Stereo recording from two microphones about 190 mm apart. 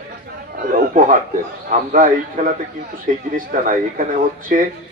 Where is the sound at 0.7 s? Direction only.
45° right (ahead or behind).